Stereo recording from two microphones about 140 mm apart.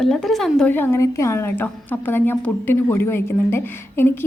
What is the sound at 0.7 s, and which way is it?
A woman's voice, 15° left (ahead or behind).